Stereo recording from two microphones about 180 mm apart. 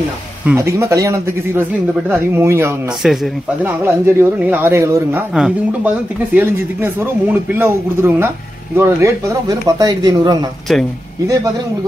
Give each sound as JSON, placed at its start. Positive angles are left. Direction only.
{"t": 0.6, "sound": "speech", "side_deg": -15}